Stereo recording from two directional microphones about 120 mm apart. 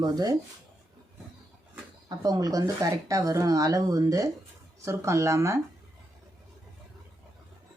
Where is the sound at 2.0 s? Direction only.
30° right (ahead or behind).